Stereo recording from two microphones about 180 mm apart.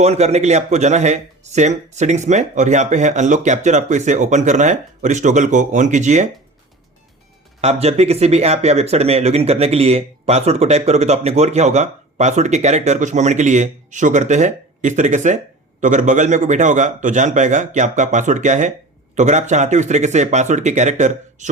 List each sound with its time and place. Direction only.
0.0 s speech: 35° right (ahead or behind)
7.6 s a man's voice: 35° right (ahead or behind)